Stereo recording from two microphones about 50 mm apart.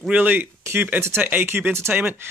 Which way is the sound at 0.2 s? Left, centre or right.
Right.